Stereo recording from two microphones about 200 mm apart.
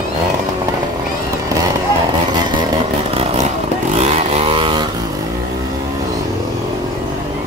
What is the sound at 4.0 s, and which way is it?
Vehicle, 35° right (ahead or behind).